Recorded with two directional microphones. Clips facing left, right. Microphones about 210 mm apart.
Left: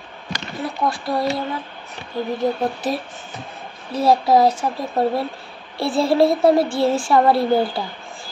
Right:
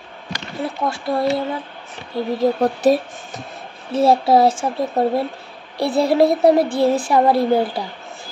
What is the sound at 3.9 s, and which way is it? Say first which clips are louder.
Speech: right 2 dB; 25° right (ahead or behind).